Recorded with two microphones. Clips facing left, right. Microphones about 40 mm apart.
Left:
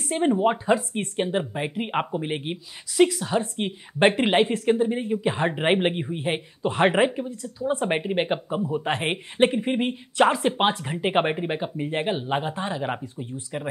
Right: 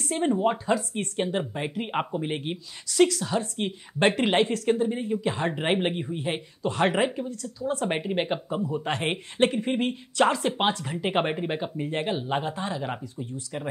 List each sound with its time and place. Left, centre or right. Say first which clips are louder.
0.1 s speech: left 3 dB; centre